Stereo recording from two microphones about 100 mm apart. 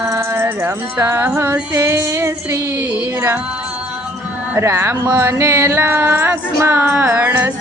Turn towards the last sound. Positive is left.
turn(degrees=-20)  # may be behind; listen again after turning